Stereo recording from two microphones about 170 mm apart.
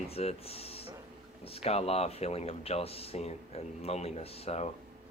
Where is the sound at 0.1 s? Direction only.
35° left (ahead or behind).